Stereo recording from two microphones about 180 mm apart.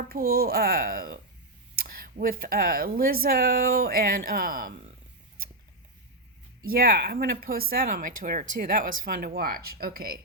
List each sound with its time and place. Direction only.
0.0 s speech: 55° right (ahead or behind)
6.7 s speech: 60° right (ahead or behind)